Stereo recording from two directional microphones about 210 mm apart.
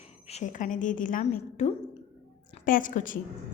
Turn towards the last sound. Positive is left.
turn(degrees=40)  # may be behind; listen again after turning